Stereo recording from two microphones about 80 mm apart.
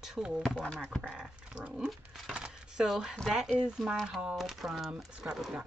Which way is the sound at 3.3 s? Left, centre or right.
Centre.